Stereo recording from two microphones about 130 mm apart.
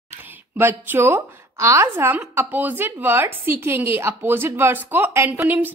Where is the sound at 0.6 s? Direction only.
20° right (ahead or behind).